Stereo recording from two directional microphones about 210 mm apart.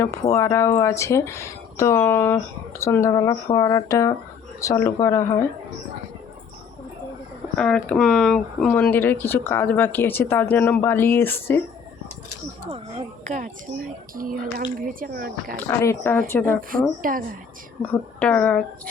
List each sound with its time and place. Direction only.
0.3 s speech: 15° left (ahead or behind)
7.5 s speech: 5° left (ahead or behind)
12.7 s speech: 30° right (ahead or behind)
15.5 s speech: 15° left (ahead or behind)
17.0 s speech: 40° right (ahead or behind)
17.9 s speech: 5° left (ahead or behind)